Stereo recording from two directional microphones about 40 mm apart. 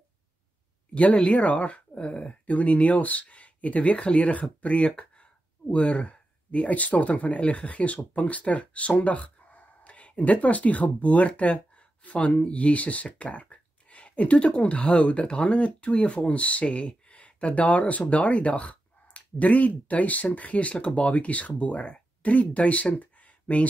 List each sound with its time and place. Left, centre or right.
0.9 s speech: left